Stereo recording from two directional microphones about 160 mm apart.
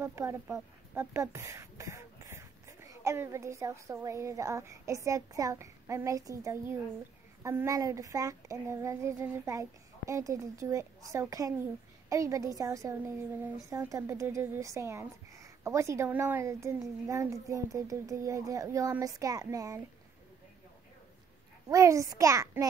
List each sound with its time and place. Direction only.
0.0 s a woman's voice: 15° right (ahead or behind)
21.6 s a woman's voice: 20° right (ahead or behind)